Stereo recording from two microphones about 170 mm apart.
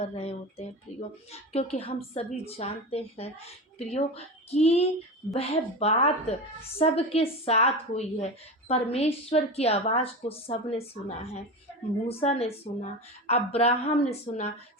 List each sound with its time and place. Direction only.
0.0 s a woman's voice: 35° left (ahead or behind)
12.0 s a woman's voice: 35° left (ahead or behind)